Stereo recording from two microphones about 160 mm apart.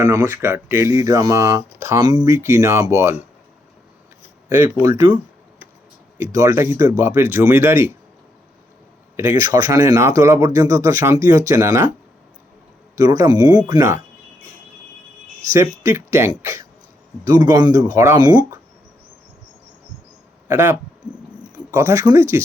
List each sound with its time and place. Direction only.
0.0 s speech: 15° right (ahead or behind)
4.4 s speech: 20° right (ahead or behind)
6.3 s speech: 20° right (ahead or behind)
9.1 s speech: 20° right (ahead or behind)
13.0 s speech: 20° right (ahead or behind)
15.5 s speech: 15° right (ahead or behind)
20.5 s speech: 15° right (ahead or behind)